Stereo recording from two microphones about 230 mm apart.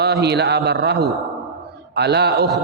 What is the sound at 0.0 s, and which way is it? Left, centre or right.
A man's voice, right.